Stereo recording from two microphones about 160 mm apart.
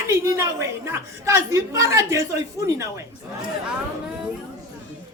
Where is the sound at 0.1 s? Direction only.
15° right (ahead or behind).